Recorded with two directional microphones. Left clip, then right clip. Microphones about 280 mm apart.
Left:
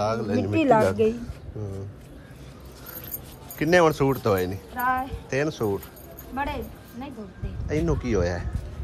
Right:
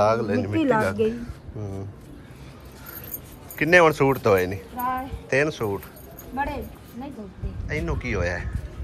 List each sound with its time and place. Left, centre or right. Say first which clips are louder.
0.0 s speech: right 4 dB; centre
3.5 s speech: right 3 dB; centre
5.4 s speech: left 1 dB; centre
6.3 s speech: right 1 dB; centre
7.6 s speech: left 2 dB; left